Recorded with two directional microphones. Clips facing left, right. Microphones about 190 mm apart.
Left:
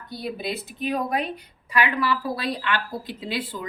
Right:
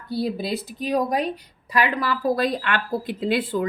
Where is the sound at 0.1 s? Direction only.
35° right (ahead or behind).